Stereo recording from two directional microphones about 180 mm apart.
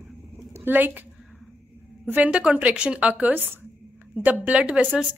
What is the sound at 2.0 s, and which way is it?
A woman's voice, 10° right (ahead or behind).